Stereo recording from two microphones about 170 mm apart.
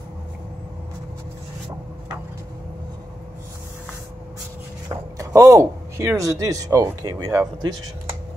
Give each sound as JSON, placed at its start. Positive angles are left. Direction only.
{"t": 4.8, "sound": "speech", "side_deg": -20}